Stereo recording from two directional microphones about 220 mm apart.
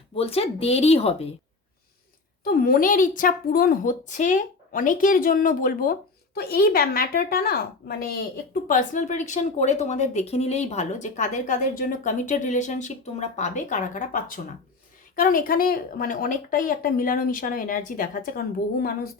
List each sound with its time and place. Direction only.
0.2 s speech: 25° left (ahead or behind)
2.4 s a woman's voice: 40° left (ahead or behind)